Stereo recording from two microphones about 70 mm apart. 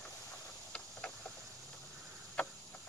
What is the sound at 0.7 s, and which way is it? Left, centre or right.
Vehicle, centre.